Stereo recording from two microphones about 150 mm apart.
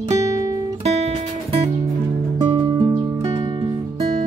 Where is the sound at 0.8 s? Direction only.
45° right (ahead or behind); by 3.8 s 30° right (ahead or behind).